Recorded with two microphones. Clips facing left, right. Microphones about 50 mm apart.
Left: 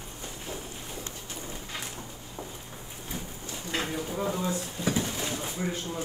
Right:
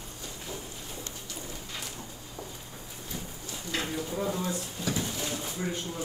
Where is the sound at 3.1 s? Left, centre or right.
Left.